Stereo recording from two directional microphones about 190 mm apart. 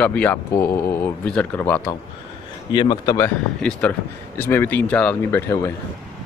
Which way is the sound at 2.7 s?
25° left (ahead or behind).